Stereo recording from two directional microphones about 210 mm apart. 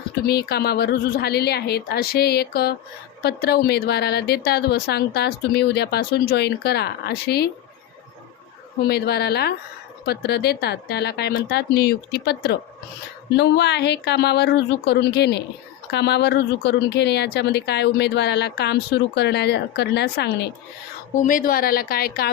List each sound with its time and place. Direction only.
0.3 s speech: 50° left (ahead or behind)
8.9 s speech: 50° left (ahead or behind)
21.2 s speech: 40° left (ahead or behind)